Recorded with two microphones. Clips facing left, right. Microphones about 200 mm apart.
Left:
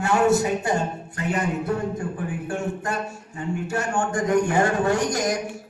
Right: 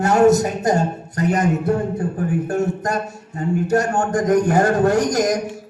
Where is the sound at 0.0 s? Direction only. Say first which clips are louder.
Right 6 dB; 40° right (ahead or behind).